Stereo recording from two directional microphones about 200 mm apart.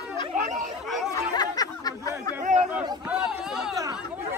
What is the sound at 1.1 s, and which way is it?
Chatter, 20° left (ahead or behind).